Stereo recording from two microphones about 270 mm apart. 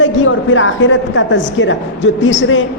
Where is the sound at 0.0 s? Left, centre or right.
Left.